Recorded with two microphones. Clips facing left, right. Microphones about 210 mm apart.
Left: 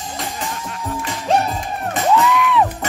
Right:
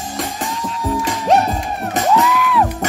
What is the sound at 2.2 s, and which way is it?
Music, centre (ahead or behind).